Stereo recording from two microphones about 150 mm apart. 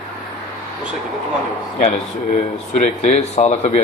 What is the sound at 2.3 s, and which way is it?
Speech, 50° left (ahead or behind).